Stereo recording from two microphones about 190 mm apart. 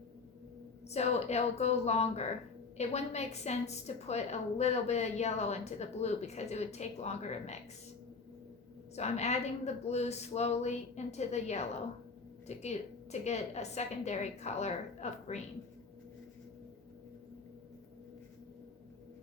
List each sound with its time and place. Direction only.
0.9 s a woman's voice: 35° left (ahead or behind)
9.0 s a woman's voice: 35° left (ahead or behind)